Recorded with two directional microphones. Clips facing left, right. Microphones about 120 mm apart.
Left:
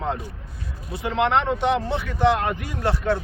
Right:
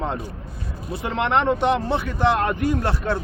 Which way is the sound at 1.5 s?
50° right (ahead or behind).